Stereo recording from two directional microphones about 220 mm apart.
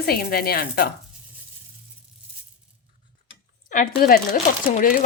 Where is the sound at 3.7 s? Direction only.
40° left (ahead or behind).